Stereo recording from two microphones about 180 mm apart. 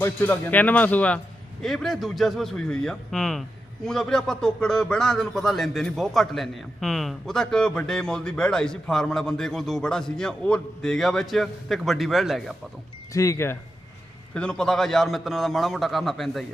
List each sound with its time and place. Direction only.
0.0 s a man's voice: 10° left (ahead or behind)
13.1 s a man's voice: 15° left (ahead or behind); by 16.5 s centre (ahead or behind)